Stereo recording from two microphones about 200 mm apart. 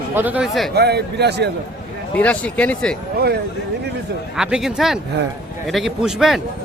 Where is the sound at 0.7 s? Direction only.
55° right (ahead or behind).